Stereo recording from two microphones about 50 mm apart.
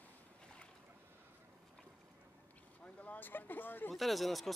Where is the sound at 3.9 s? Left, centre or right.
Centre.